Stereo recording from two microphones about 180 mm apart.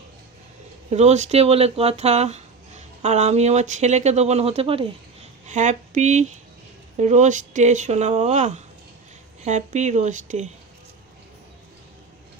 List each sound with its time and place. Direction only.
0.9 s speech: 40° right (ahead or behind)